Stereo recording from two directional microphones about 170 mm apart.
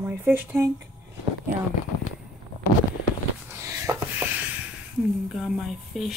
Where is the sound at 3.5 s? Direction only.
15° right (ahead or behind).